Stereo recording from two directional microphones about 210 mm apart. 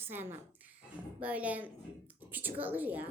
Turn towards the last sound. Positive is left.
turn(degrees=-10)  # may be behind; listen again after turning